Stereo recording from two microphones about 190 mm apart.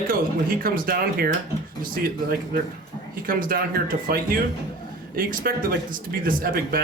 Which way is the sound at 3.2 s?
45° right (ahead or behind).